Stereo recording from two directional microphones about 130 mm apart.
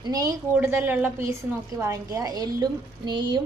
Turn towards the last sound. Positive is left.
turn(degrees=-35)  # may be behind; listen again after turning